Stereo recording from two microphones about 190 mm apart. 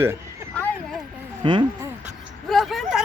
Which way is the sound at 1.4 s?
25° right (ahead or behind).